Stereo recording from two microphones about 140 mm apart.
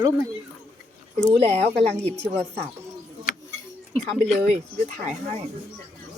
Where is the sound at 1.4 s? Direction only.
45° right (ahead or behind).